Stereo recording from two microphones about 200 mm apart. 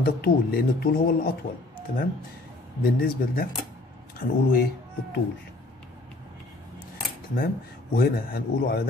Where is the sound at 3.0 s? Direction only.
45° left (ahead or behind).